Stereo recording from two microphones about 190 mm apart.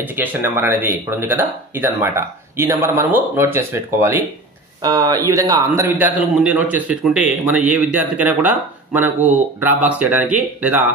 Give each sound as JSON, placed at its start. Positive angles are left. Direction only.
{"t": 0.0, "sound": "speech", "side_deg": -10}